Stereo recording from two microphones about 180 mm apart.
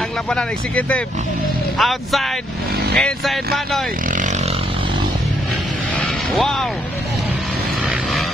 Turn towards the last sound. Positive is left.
turn(degrees=0)  # may be behind; listen again after turning